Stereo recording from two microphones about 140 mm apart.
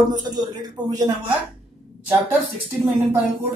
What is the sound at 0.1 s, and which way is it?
Speech, 30° right (ahead or behind).